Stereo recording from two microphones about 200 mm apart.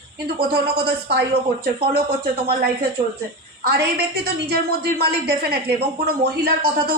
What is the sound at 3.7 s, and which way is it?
A woman's voice, 55° right (ahead or behind).